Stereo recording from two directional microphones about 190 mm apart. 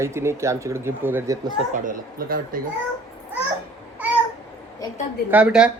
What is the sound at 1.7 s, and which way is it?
Speech, 45° right (ahead or behind).